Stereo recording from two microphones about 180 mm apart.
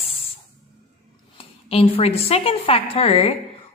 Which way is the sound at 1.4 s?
30° left (ahead or behind).